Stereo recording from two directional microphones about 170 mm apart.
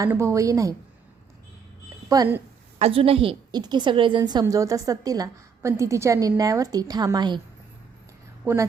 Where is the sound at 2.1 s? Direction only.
20° right (ahead or behind).